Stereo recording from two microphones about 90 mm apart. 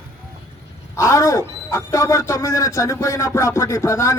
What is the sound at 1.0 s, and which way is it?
Speech, 35° left (ahead or behind).